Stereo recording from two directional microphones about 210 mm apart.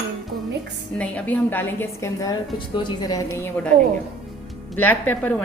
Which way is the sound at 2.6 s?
25° left (ahead or behind).